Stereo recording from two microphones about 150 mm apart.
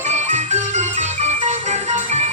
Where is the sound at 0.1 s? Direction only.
50° right (ahead or behind).